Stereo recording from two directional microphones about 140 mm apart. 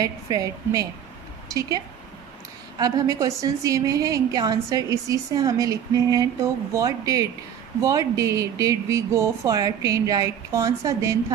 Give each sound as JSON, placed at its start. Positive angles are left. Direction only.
{"t": 0.0, "sound": "a woman's voice", "side_deg": -25}
{"t": 2.8, "sound": "a woman's voice", "side_deg": -25}